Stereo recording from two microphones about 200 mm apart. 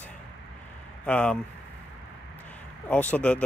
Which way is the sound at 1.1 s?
5° left (ahead or behind).